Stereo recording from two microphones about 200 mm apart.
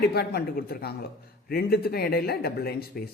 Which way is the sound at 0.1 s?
55° left (ahead or behind).